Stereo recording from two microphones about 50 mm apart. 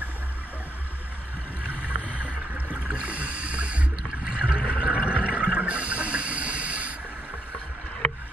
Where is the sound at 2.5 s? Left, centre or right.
Right.